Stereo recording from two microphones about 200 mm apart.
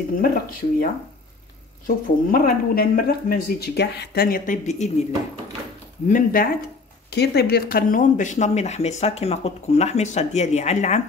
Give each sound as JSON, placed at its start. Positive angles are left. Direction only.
{"t": 0.2, "sound": "speech", "side_deg": 45}
{"t": 1.9, "sound": "speech", "side_deg": 45}
{"t": 6.0, "sound": "speech", "side_deg": 40}
{"t": 7.1, "sound": "speech", "side_deg": 55}